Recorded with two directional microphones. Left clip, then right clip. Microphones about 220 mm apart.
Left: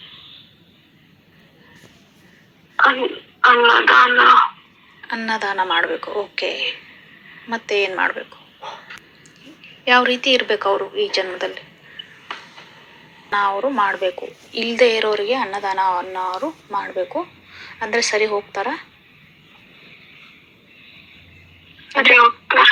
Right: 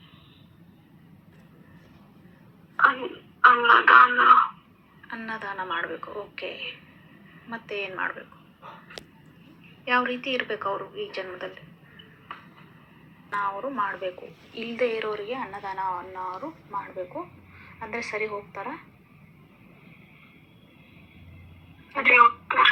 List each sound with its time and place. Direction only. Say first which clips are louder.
2.7 s a woman's voice: left 6 dB; 45° left (ahead or behind)
7.3 s a sound: left 13 dB; 45° left (ahead or behind)
9.8 s a woman's voice: left 10 dB; 40° left (ahead or behind)
21.9 s speech: left 6 dB; 40° left (ahead or behind)